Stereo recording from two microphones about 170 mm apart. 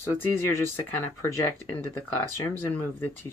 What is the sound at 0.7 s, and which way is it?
Speech, 15° left (ahead or behind).